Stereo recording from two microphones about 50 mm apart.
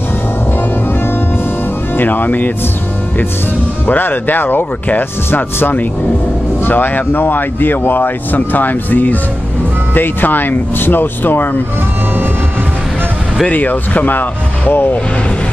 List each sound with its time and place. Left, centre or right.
2.0 s speech: left
3.8 s speech: left
13.5 s speech: left